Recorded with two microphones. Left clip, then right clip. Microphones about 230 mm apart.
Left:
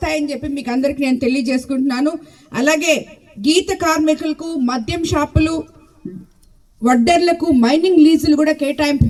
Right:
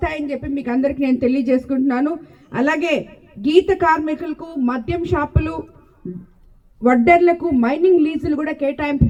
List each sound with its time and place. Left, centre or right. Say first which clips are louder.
0.0 s a woman's voice: left 3 dB; left
6.8 s a woman's voice: right 1 dB; left